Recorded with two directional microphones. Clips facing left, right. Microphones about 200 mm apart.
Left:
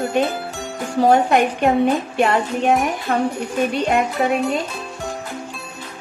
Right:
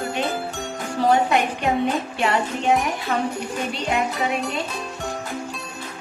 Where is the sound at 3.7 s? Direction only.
55° left (ahead or behind).